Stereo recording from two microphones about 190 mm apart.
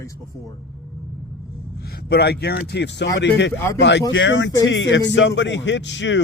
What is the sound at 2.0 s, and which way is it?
Speech, 60° left (ahead or behind).